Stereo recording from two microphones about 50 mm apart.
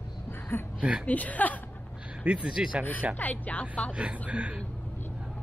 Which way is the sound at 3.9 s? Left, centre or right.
Right.